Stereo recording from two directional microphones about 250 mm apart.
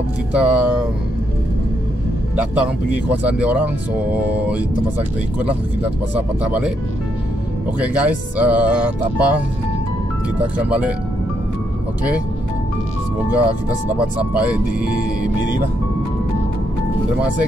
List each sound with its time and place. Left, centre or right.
0.4 s speech: centre
3.1 s speech: centre
6.1 s speech: centre
7.8 s speech: centre
10.4 s speech: centre
14.3 s speech: centre